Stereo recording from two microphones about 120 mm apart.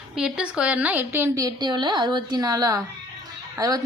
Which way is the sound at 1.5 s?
40° right (ahead or behind).